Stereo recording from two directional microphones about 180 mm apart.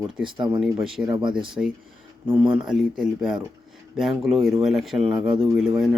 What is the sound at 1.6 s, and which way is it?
Speech, 10° right (ahead or behind).